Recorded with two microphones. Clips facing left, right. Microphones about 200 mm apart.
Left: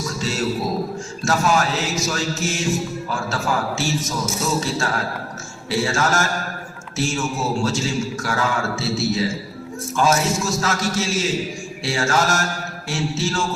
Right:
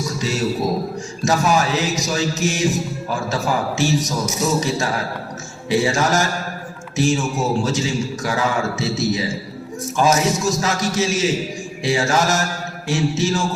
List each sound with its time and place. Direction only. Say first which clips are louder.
0.2 s a man's voice: right 1 dB; 15° right (ahead or behind)
1.2 s music: right 2 dB; 15° right (ahead or behind)